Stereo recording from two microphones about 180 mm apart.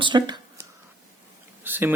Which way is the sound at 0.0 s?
25° right (ahead or behind).